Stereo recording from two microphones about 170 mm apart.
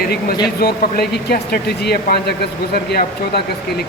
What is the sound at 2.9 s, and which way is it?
Speech, 70° left (ahead or behind).